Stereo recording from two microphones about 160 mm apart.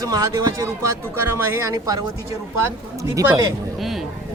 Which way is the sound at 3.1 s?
20° right (ahead or behind).